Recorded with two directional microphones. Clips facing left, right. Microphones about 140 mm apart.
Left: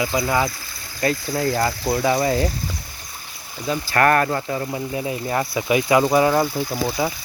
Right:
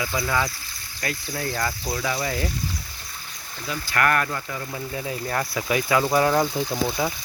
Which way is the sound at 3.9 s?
35° left (ahead or behind).